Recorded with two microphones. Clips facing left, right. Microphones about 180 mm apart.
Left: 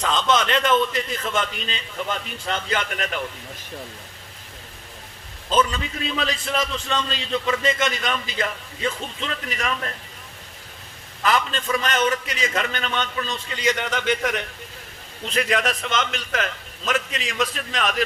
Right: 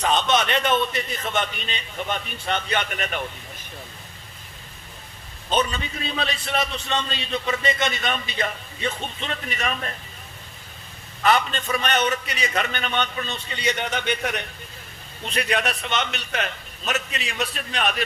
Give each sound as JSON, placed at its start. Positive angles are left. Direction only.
{"t": 0.0, "sound": "a man's voice", "side_deg": 90}
{"t": 5.5, "sound": "a man's voice", "side_deg": 90}
{"t": 11.2, "sound": "a man's voice", "side_deg": 90}